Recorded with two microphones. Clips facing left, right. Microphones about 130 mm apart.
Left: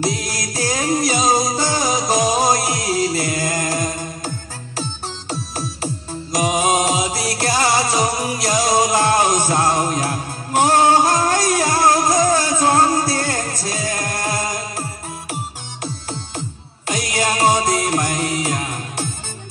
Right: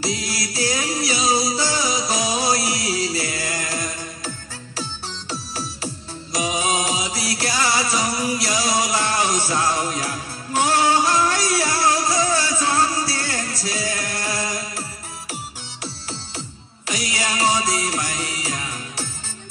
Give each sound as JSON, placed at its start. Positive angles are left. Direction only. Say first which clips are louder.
{"t": 0.0, "sound": "music", "louder": "left 3 dB", "side_deg": 45}
{"t": 5.3, "sound": "music", "louder": "left 4 dB", "side_deg": 45}